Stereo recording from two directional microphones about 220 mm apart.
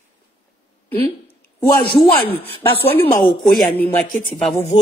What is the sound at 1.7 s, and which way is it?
Speech, 25° left (ahead or behind).